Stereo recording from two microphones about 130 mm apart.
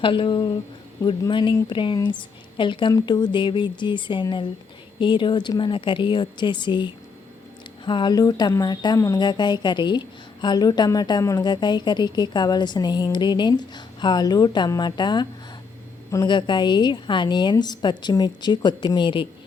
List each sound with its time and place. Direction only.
0.0 s speech: 40° left (ahead or behind)